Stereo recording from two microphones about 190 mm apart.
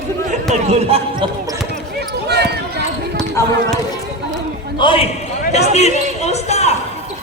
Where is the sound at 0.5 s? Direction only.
35° right (ahead or behind).